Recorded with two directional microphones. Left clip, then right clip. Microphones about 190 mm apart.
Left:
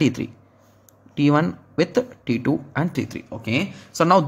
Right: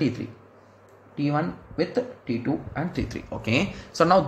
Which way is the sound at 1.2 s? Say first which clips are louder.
Left 7 dB; 50° left (ahead or behind).